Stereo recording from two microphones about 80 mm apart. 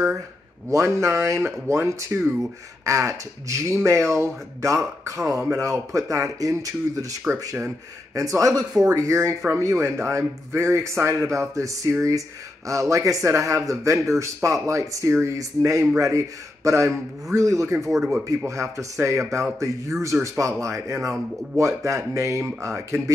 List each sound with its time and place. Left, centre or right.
0.7 s speech: right
2.8 s speech: right
12.9 s speech: right
17.7 s speech: centre
18.5 s speech: right